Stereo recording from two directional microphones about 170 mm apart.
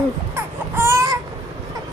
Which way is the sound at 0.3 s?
15° right (ahead or behind).